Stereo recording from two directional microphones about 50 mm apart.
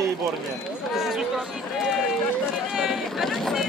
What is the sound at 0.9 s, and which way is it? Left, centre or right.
Speech, centre.